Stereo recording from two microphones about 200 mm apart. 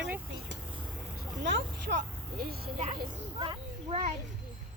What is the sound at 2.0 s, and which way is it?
Speech, 50° right (ahead or behind).